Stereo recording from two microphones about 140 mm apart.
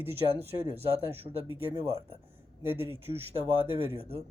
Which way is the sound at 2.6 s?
15° right (ahead or behind).